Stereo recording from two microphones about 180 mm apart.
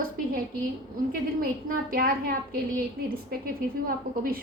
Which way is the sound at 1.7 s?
50° right (ahead or behind).